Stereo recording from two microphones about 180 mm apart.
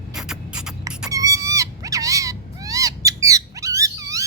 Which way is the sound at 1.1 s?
20° right (ahead or behind).